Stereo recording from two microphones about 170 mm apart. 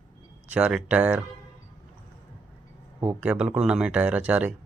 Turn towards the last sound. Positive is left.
turn(degrees=-10)  # may be behind; listen again after turning